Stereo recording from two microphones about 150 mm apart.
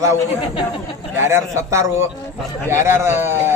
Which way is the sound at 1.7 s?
20° right (ahead or behind).